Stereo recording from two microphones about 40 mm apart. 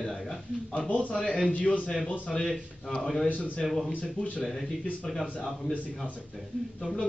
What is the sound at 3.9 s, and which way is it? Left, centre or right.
Speech, left.